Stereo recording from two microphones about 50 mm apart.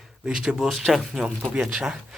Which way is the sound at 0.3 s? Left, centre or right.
Centre.